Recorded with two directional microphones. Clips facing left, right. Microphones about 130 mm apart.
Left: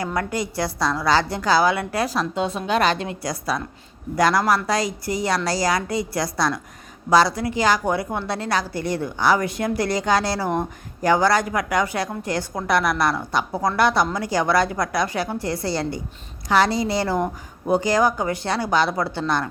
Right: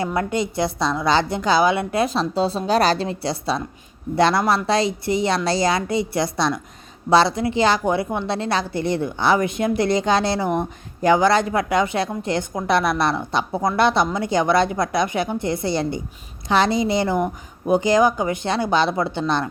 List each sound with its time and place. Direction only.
0.0 s a woman's voice: 25° right (ahead or behind)